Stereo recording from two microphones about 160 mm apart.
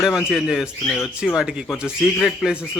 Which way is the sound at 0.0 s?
Centre (ahead or behind).